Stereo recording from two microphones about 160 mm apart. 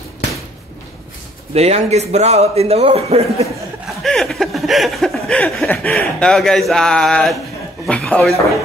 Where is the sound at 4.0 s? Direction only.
Centre (ahead or behind).